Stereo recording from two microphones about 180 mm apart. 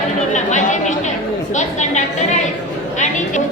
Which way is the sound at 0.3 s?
40° left (ahead or behind).